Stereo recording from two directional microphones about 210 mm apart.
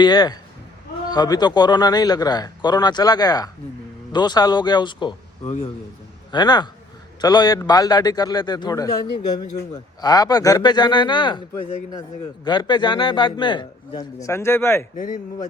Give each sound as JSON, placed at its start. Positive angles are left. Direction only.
{"t": 0.0, "sound": "a man's voice", "side_deg": 20}
{"t": 6.3, "sound": "a man's voice", "side_deg": 20}
{"t": 14.9, "sound": "speech", "side_deg": 40}